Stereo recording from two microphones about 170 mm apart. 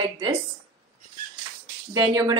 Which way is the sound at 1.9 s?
20° right (ahead or behind).